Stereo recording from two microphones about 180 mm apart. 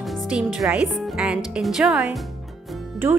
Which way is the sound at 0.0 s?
Centre (ahead or behind).